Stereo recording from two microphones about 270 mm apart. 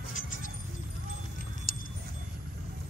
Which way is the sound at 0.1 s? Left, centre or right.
Left.